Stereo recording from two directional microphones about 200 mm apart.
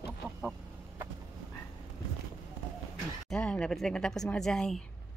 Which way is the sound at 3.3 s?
5° left (ahead or behind).